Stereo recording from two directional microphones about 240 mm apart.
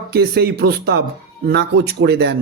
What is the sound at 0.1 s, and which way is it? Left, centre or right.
A man's voice, right.